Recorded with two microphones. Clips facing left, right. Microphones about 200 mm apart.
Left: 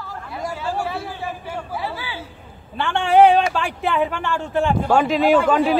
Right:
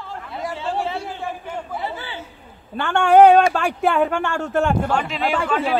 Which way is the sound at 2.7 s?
45° right (ahead or behind).